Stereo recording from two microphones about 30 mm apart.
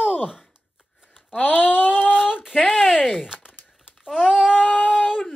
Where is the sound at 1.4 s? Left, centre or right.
Left.